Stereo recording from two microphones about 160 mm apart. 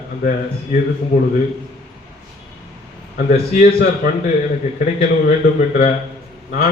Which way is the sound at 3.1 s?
60° left (ahead or behind).